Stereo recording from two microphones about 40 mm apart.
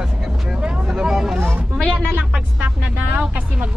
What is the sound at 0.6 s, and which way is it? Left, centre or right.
Vehicle, right.